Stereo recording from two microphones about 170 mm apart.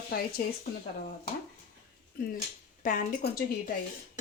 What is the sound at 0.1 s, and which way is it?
Speech, 65° left (ahead or behind).